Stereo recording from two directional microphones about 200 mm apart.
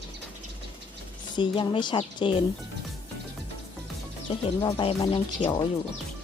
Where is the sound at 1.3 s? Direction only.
25° left (ahead or behind).